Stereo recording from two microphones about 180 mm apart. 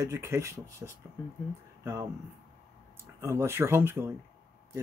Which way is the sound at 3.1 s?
15° right (ahead or behind).